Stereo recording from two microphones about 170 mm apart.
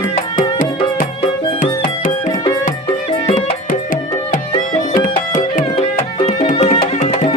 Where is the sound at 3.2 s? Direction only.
45° left (ahead or behind).